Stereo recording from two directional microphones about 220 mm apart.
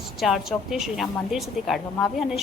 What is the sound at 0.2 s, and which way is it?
A woman's voice, centre (ahead or behind).